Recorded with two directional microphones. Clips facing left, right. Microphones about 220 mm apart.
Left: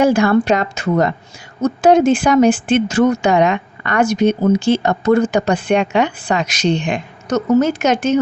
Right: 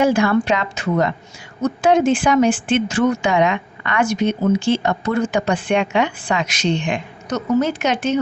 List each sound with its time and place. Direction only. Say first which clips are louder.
0.0 s speech: left 3 dB; 40° left (ahead or behind)